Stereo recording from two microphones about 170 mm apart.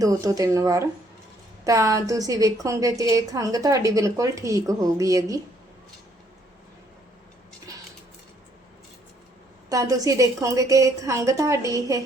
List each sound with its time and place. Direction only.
0.0 s a woman's voice: 20° right (ahead or behind)
7.7 s a sound: 20° right (ahead or behind)
9.6 s a woman's voice: 20° right (ahead or behind)